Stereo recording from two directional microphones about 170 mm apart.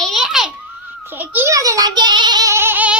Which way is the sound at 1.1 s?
10° right (ahead or behind).